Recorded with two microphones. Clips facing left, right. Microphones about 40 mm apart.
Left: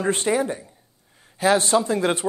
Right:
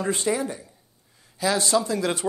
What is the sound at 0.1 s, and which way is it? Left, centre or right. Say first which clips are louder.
Speech: left 4 dB; left.